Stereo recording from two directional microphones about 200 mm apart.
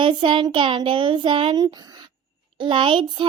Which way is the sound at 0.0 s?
25° right (ahead or behind).